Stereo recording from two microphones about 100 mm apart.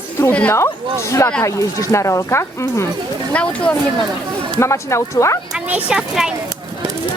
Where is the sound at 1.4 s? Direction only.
30° left (ahead or behind).